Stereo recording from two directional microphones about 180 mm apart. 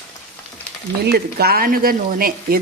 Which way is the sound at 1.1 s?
60° right (ahead or behind).